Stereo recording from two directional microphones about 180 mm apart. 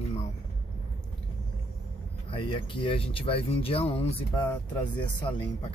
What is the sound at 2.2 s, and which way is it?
Speech, 30° left (ahead or behind).